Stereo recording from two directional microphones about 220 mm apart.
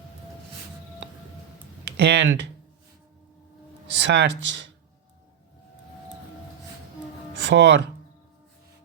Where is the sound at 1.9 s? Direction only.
55° right (ahead or behind).